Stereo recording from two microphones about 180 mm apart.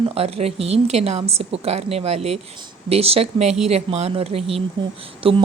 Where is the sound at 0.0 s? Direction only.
35° right (ahead or behind).